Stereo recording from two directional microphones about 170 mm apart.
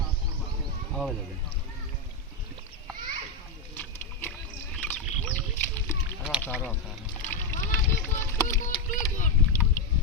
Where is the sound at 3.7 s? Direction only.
10° left (ahead or behind).